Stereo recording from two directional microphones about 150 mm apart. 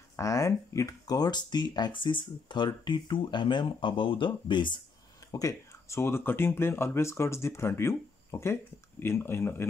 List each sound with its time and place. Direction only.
0.1 s speech: 20° left (ahead or behind)